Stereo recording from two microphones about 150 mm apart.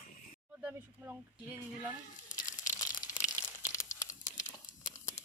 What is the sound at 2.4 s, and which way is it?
Crumpling, 55° left (ahead or behind).